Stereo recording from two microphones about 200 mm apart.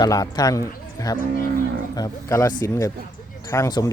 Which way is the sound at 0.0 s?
20° left (ahead or behind).